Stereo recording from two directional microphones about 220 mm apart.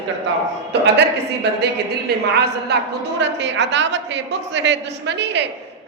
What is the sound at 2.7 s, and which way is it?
A man's voice, 50° right (ahead or behind).